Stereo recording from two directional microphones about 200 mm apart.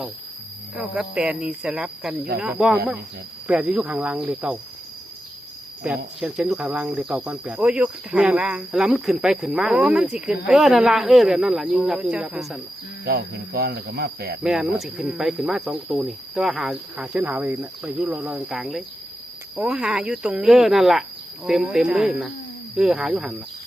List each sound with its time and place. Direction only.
0.8 s speech: 5° right (ahead or behind)
6.1 s speech: 5° right (ahead or behind)
13.1 s speech: 55° right (ahead or behind)
14.4 s speech: centre (ahead or behind)